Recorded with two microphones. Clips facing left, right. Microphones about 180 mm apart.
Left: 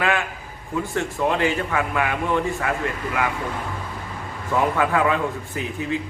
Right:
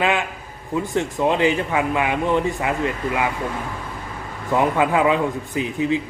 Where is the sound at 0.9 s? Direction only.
20° right (ahead or behind).